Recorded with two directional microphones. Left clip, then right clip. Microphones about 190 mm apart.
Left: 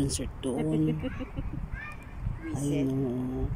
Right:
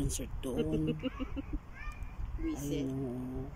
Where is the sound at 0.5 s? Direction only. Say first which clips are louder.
Left 4 dB; 65° right (ahead or behind).